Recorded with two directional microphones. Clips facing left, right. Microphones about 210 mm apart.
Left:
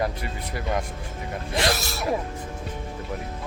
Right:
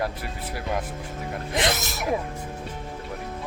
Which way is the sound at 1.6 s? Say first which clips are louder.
Left 1 dB; 20° right (ahead or behind).